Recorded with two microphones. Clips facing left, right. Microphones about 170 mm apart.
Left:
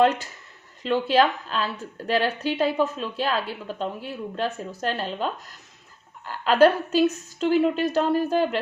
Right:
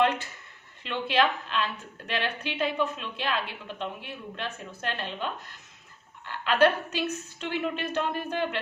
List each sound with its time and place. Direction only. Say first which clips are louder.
0.8 s a woman's voice: left 6 dB; 40° left (ahead or behind)